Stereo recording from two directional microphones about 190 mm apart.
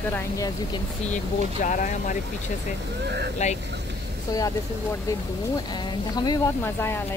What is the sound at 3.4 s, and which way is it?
Speech, 40° left (ahead or behind).